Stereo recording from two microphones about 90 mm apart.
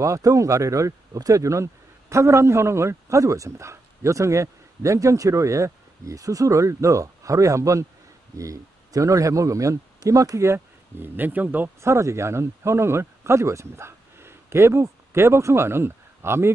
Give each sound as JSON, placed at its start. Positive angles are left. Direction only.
{"t": 0.0, "sound": "a man's voice", "side_deg": -35}